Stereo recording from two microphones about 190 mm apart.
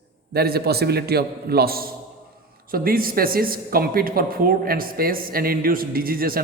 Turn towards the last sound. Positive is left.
turn(degrees=-50)  # may be behind; listen again after turning